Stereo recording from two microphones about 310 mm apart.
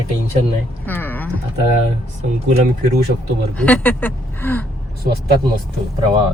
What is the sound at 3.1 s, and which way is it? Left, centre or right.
Speech, right.